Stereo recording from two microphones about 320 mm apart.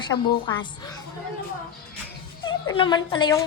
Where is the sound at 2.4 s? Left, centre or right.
Centre.